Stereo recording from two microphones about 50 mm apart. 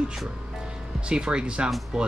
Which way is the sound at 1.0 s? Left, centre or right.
Centre.